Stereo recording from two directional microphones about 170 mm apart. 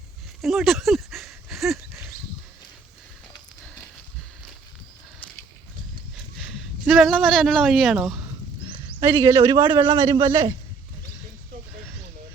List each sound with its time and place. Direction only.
0.4 s a sound: centre (ahead or behind)
6.4 s speech: centre (ahead or behind)
9.0 s a man's voice: 15° right (ahead or behind)